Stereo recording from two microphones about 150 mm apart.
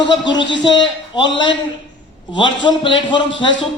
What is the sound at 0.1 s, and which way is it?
A man's voice, 30° left (ahead or behind).